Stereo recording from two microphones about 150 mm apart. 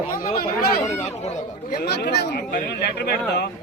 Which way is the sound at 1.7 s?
90° left.